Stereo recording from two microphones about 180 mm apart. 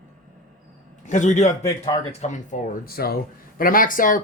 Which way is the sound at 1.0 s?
40° left (ahead or behind).